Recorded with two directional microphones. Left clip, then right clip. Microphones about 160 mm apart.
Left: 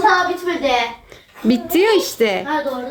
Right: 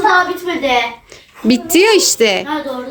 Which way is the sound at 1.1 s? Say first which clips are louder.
Right 3 dB; 10° right (ahead or behind).